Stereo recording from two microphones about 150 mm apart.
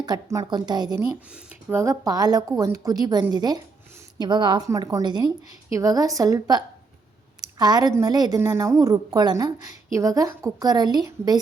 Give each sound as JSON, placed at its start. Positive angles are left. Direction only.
{"t": 0.0, "sound": "a woman's voice", "side_deg": -25}